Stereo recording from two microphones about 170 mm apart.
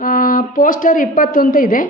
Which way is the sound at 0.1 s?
55° left (ahead or behind).